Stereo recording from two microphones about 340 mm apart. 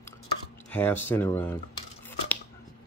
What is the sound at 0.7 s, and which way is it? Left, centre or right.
Speech, centre.